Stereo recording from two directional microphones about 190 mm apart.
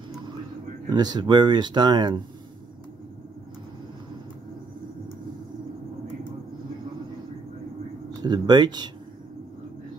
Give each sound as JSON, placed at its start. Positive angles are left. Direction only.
{"t": 0.8, "sound": "speech", "side_deg": -20}
{"t": 8.2, "sound": "speech", "side_deg": -20}